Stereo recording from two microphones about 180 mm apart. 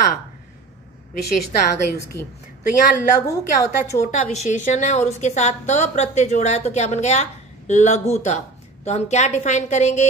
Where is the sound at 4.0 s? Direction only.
40° left (ahead or behind).